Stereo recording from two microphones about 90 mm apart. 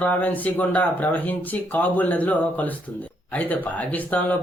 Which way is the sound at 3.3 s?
15° left (ahead or behind).